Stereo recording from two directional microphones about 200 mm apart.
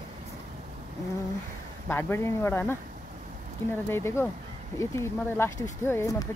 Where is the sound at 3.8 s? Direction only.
10° left (ahead or behind).